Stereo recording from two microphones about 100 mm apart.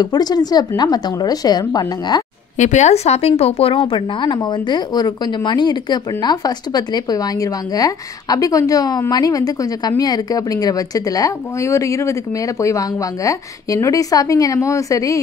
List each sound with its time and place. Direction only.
0.0 s speech: 45° left (ahead or behind)
2.9 s a woman's voice: 90° left; by 15.1 s 35° left (ahead or behind)